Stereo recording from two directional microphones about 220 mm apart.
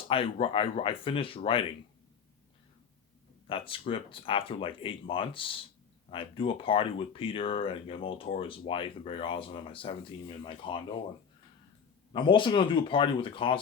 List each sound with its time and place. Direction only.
0.1 s speech: 25° left (ahead or behind)
3.4 s speech: 25° left (ahead or behind)
12.1 s speech: 20° left (ahead or behind)